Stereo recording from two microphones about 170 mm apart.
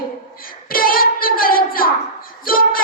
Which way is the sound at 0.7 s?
60° left (ahead or behind).